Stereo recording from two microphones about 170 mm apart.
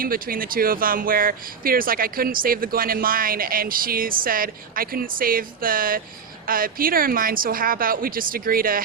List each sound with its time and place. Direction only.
0.0 s speech: 60° right (ahead or behind)